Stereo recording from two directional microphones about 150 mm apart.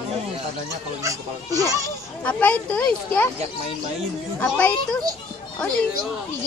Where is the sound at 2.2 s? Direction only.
10° left (ahead or behind).